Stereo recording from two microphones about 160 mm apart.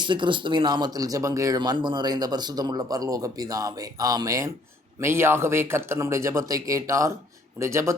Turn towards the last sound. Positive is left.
turn(degrees=-20)  # may be behind; listen again after turning